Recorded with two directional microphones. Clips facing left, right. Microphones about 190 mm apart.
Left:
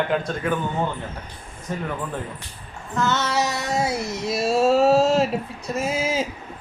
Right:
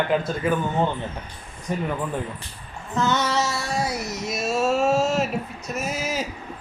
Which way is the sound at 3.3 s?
15° left (ahead or behind).